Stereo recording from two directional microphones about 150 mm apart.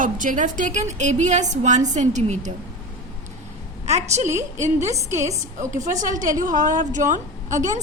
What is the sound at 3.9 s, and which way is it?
Speech, 45° right (ahead or behind).